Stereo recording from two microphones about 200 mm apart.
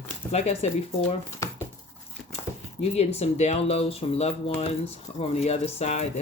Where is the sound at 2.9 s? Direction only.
30° left (ahead or behind).